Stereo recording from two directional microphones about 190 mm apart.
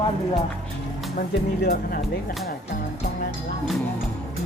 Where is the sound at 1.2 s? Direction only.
45° left (ahead or behind).